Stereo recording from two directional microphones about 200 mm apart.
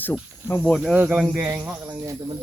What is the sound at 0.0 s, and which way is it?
Speech, 10° left (ahead or behind).